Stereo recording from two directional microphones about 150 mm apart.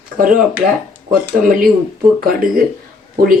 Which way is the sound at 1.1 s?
70° right (ahead or behind).